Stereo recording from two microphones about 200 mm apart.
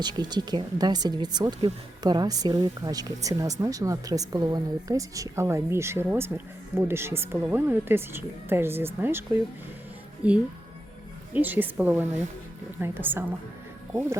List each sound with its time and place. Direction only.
0.0 s a woman's voice: 20° right (ahead or behind)